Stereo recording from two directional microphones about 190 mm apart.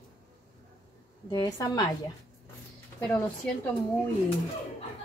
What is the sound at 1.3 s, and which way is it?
Speech, 20° left (ahead or behind).